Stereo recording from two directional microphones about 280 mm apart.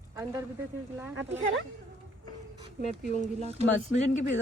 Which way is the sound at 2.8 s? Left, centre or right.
Right.